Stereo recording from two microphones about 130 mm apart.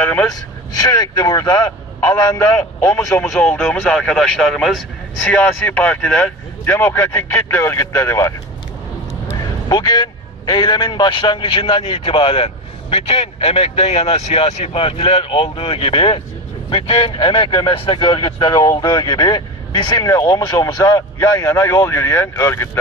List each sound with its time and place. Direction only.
0.0 s speech: 15° left (ahead or behind)
0.7 s speech: 30° left (ahead or behind)
3.3 s a man's voice: 5° left (ahead or behind)